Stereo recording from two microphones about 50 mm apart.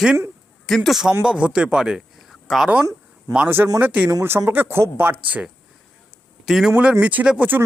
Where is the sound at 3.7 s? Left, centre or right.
Right.